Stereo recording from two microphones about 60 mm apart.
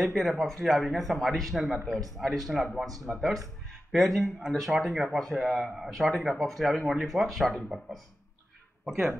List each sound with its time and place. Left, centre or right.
0.0 s speech: centre
8.8 s speech: centre